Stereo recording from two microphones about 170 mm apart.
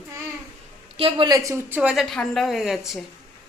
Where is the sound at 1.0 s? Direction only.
30° right (ahead or behind).